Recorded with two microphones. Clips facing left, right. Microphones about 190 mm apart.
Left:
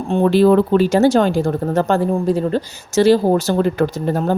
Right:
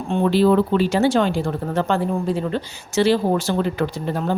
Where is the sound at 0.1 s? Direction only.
45° left (ahead or behind).